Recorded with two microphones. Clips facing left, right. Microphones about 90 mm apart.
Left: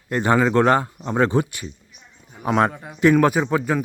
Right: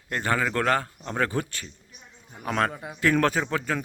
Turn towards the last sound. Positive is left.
turn(degrees=15)  # may be behind; listen again after turning